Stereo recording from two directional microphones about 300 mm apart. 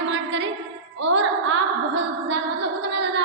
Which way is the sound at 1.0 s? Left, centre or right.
Right.